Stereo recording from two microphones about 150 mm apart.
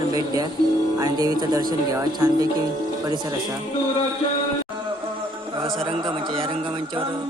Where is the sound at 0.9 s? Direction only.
25° right (ahead or behind).